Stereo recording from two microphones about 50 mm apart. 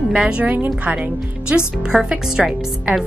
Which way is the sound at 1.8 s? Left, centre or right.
Centre.